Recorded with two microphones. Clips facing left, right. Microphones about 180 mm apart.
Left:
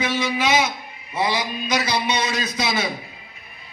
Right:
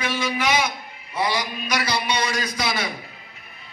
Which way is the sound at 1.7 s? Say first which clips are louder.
Left 2 dB; 15° left (ahead or behind).